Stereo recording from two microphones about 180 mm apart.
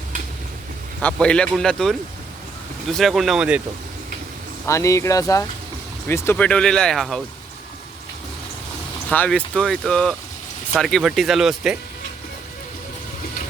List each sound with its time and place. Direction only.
1.0 s speech: 5° left (ahead or behind)
4.6 s speech: 15° left (ahead or behind)
9.0 s speech: 5° left (ahead or behind)